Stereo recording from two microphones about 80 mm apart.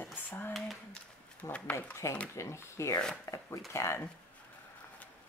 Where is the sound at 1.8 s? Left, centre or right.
Left.